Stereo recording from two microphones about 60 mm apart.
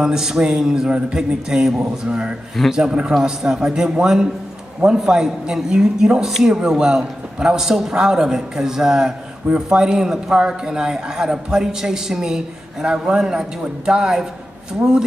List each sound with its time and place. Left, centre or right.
0.0 s a man's voice: centre